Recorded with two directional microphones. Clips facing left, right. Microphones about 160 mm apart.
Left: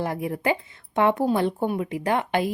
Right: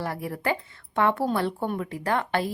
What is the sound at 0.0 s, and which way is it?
Speech, 20° left (ahead or behind).